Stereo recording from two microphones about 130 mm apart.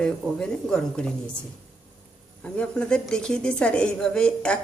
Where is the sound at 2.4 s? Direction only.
10° left (ahead or behind).